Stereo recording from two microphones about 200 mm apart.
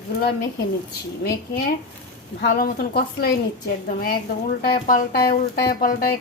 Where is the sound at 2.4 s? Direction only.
50° left (ahead or behind).